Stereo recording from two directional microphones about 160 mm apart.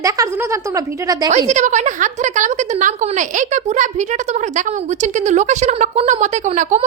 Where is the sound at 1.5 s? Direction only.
50° right (ahead or behind).